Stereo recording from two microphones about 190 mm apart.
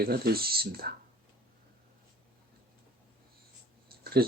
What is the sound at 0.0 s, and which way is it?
Speech, 55° right (ahead or behind).